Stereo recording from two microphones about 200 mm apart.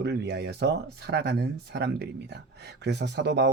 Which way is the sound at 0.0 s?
55° right (ahead or behind).